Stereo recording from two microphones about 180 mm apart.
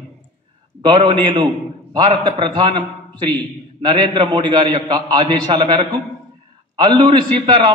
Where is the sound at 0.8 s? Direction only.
25° right (ahead or behind).